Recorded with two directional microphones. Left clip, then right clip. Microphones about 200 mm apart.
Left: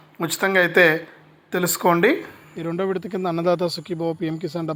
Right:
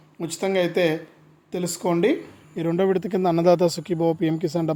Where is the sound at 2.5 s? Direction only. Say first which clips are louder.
Right 3 dB; 20° right (ahead or behind).